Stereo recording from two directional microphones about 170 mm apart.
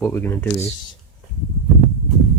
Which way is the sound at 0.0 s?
15° left (ahead or behind).